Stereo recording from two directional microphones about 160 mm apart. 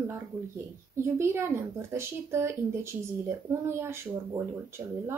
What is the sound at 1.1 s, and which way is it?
Speech, 15° right (ahead or behind).